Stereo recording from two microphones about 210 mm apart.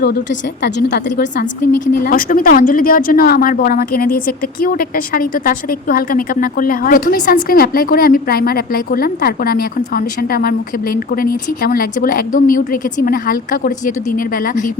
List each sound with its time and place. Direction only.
0.0 s a woman's voice: 50° left (ahead or behind)